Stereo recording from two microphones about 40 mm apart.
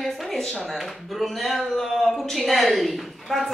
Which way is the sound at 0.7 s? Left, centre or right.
Centre.